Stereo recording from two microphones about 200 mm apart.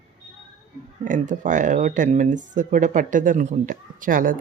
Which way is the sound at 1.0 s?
40° right (ahead or behind).